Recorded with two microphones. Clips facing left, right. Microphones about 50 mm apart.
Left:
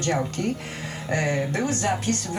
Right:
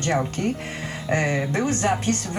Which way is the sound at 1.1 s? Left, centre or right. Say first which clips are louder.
Right 2 dB; right.